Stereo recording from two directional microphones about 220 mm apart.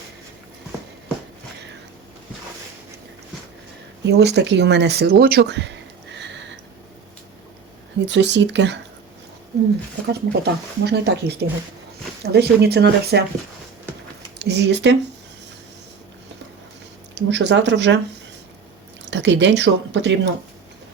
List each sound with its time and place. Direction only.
4.0 s speech: 50° right (ahead or behind)
8.0 s speech: 55° right (ahead or behind)
10.1 s speech: 50° right (ahead or behind)
14.3 s speech: 50° right (ahead or behind)
17.2 s speech: 55° right (ahead or behind)
19.1 s speech: 55° right (ahead or behind)